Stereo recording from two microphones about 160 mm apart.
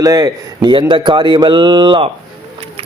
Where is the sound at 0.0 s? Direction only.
20° right (ahead or behind).